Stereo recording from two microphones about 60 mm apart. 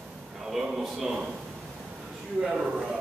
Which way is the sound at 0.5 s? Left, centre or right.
Centre.